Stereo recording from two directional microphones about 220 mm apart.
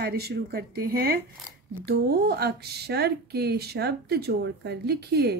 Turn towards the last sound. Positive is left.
turn(degrees=-45)  # may be behind; listen again after turning